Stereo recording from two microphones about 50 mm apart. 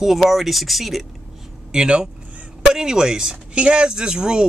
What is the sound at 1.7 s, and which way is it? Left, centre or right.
Speech, centre.